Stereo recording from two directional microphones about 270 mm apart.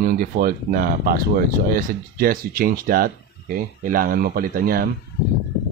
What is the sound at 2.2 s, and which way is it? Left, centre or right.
Speech, right.